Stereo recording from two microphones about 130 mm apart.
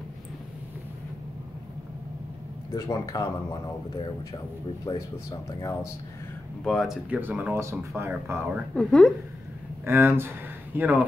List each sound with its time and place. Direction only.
2.7 s speech: 25° left (ahead or behind)
4.9 s speech: 35° left (ahead or behind)
6.6 s a woman's voice: 5° left (ahead or behind)
7.1 s speech: 15° right (ahead or behind)
8.7 s a woman's voice: 5° left (ahead or behind)
9.8 s speech: 20° right (ahead or behind)